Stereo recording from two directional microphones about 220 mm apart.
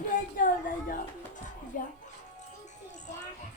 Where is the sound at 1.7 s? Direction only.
40° left (ahead or behind).